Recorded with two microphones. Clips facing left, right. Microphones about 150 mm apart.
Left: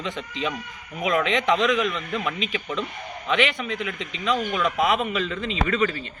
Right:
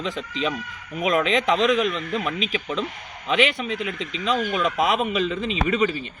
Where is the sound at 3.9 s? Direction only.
35° right (ahead or behind).